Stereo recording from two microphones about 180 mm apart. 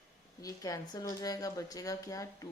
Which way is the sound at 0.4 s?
20° left (ahead or behind).